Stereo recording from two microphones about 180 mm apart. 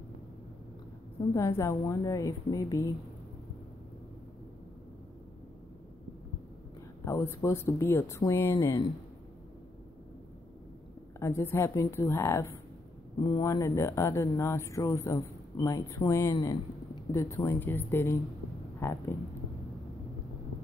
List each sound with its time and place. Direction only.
1.6 s speech: 15° left (ahead or behind)
7.1 s speech: 15° left (ahead or behind)
11.1 s speech: 15° left (ahead or behind)